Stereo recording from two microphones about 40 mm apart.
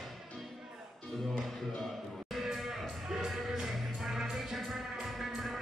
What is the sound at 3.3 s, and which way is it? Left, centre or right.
Music, centre.